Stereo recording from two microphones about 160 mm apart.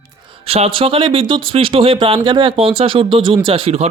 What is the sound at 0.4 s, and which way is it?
Speech, 35° right (ahead or behind).